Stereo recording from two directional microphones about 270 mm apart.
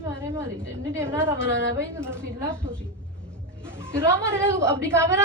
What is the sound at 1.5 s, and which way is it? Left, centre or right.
Speech, right.